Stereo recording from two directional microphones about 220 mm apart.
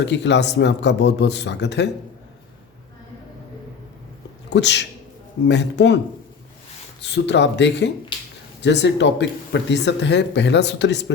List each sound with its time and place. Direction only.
0.0 s speech: 50° left (ahead or behind)
4.4 s speech: 50° left (ahead or behind)
7.0 s speech: 50° left (ahead or behind)